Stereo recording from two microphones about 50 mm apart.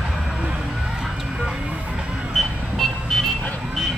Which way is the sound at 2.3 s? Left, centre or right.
Centre.